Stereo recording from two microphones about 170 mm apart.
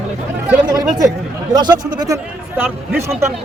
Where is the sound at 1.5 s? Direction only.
25° right (ahead or behind).